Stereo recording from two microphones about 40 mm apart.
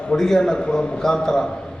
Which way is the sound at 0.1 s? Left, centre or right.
Centre.